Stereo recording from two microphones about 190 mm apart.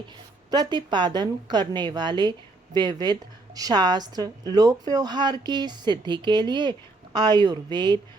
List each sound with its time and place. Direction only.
0.5 s speech: 20° right (ahead or behind)